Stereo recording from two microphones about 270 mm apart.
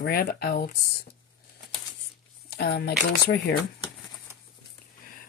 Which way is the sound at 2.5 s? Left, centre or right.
Left.